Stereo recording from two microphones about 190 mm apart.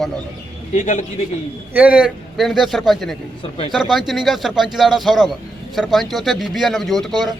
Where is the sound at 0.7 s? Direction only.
40° left (ahead or behind).